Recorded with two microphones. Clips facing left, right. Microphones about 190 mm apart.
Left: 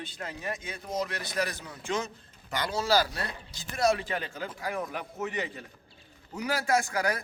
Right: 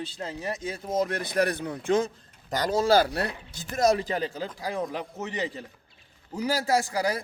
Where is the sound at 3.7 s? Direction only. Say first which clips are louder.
Right 4 dB; 40° right (ahead or behind).